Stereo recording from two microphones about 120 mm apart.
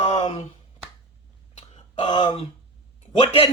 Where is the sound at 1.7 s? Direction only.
40° left (ahead or behind).